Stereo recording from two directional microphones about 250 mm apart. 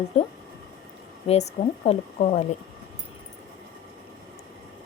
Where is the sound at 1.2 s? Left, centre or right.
Left.